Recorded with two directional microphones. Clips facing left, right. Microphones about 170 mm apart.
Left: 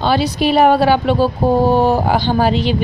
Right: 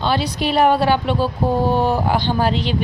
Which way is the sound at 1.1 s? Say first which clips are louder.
Left 5 dB; 35° left (ahead or behind).